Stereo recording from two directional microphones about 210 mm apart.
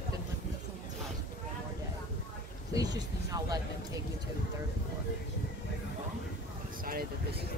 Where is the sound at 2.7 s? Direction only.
20° right (ahead or behind).